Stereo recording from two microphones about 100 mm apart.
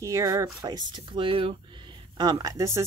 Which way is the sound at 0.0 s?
30° right (ahead or behind).